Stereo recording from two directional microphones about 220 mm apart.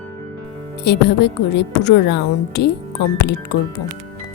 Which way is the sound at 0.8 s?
50° left (ahead or behind).